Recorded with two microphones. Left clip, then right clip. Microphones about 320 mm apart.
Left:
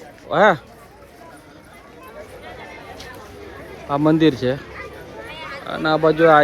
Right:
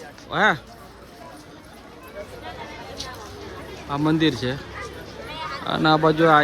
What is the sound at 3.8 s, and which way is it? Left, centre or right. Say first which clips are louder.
Speech: left 5 dB; centre.